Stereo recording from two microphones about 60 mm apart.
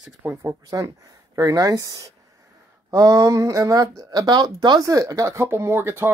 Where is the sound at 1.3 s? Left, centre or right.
Right.